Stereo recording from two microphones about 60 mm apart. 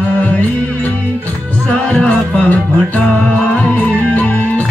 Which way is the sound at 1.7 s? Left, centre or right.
Left.